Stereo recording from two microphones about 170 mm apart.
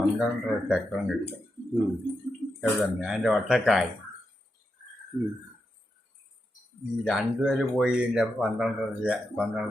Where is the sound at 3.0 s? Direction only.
Centre (ahead or behind).